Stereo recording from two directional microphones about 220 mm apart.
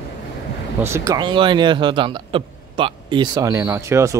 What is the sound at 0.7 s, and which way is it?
Speech, 10° right (ahead or behind).